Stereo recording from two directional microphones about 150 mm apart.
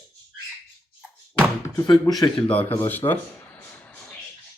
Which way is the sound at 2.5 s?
10° left (ahead or behind).